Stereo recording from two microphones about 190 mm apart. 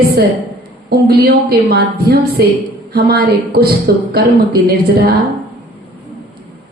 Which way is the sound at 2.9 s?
55° right (ahead or behind).